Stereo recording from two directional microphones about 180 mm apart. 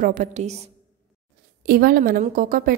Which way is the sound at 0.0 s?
45° right (ahead or behind).